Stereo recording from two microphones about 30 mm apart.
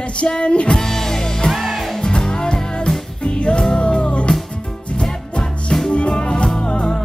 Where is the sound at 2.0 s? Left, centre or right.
Left.